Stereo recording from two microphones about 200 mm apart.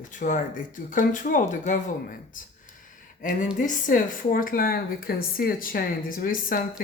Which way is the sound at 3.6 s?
40° left (ahead or behind).